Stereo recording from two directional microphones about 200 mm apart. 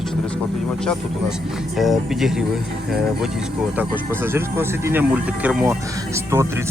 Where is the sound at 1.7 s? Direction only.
Centre (ahead or behind).